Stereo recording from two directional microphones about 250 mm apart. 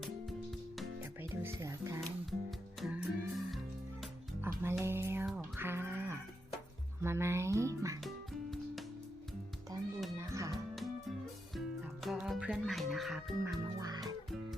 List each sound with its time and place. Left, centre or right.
0.8 s music: centre
2.8 s music: centre
8.0 s music: centre
10.2 s music: centre
12.0 s music: centre
13.7 s music: centre